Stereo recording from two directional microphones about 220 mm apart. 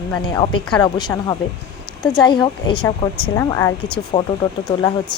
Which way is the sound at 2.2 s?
20° left (ahead or behind).